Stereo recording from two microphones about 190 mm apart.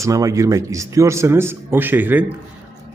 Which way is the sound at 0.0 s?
15° right (ahead or behind).